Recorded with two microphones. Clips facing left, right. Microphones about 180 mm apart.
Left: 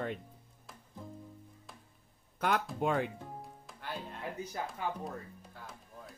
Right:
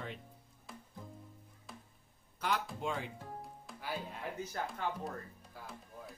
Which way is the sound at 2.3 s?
55° left (ahead or behind).